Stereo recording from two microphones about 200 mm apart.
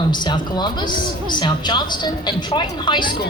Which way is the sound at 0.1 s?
20° left (ahead or behind).